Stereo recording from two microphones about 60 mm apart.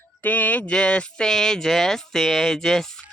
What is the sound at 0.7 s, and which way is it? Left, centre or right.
Speech, centre.